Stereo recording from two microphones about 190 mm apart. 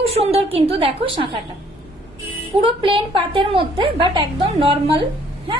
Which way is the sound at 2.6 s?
25° right (ahead or behind).